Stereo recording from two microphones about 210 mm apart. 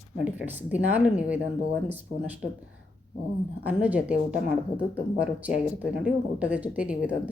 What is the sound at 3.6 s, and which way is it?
Speech, 5° right (ahead or behind).